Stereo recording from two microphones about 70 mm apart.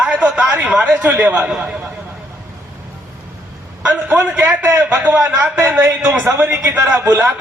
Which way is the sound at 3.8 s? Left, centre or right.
Centre.